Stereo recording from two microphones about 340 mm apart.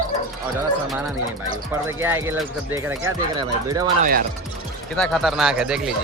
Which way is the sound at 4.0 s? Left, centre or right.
Right.